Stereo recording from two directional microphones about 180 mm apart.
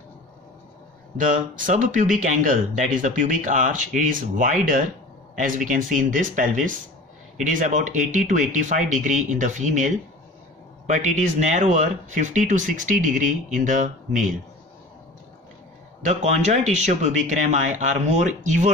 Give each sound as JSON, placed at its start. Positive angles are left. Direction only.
{"t": 1.1, "sound": "speech", "side_deg": -45}
{"t": 16.0, "sound": "speech", "side_deg": -40}